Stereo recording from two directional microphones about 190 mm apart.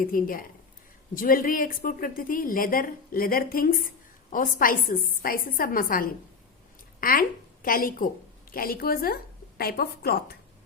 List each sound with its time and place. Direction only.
0.0 s speech: 50° left (ahead or behind)